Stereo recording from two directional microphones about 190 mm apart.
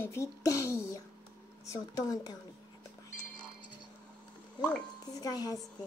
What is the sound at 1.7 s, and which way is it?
Speech, 20° left (ahead or behind).